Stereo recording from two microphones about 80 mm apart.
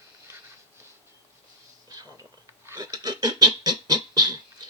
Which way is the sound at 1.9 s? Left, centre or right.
Right.